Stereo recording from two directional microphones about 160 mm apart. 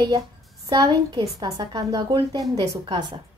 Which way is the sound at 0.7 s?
25° right (ahead or behind).